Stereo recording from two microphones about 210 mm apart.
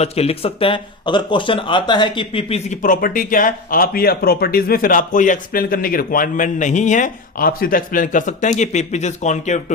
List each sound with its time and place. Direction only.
0.0 s speech: 30° left (ahead or behind)